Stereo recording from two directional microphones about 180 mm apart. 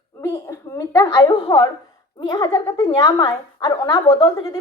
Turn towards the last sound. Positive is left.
turn(degrees=20)  # may be behind; listen again after turning